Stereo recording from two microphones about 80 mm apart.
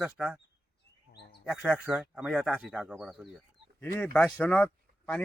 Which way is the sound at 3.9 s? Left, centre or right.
Centre.